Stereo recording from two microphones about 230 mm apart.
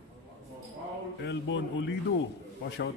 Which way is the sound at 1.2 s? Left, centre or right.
Left.